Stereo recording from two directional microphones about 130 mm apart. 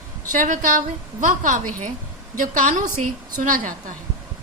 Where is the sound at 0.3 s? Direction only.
80° right.